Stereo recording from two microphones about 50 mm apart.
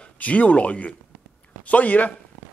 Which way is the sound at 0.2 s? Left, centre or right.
Left.